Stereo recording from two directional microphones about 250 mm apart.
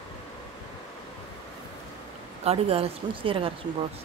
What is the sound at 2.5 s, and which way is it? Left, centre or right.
Speech, right.